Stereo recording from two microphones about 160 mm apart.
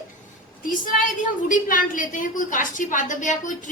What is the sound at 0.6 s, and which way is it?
A woman's voice, 55° left (ahead or behind).